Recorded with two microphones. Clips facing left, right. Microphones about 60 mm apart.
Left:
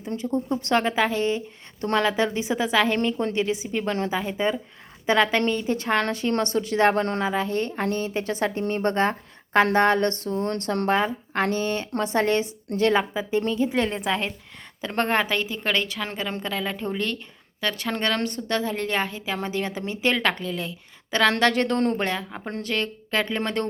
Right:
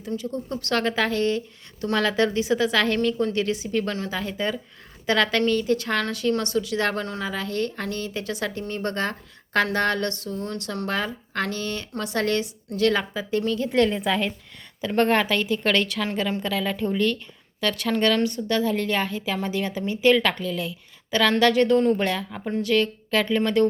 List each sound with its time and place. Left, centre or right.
0.2 s a woman's voice: left
7.0 s a woman's voice: left
7.3 s a woman's voice: left
10.8 s a woman's voice: left
14.8 s speech: left
18.1 s a woman's voice: left
21.9 s a woman's voice: left